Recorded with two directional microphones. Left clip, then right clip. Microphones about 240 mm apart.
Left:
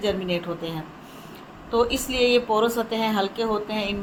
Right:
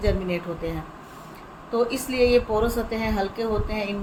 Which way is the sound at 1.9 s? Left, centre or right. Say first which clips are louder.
Right 1 dB; centre.